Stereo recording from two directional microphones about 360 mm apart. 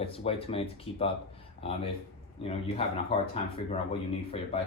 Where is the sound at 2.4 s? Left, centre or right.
Centre.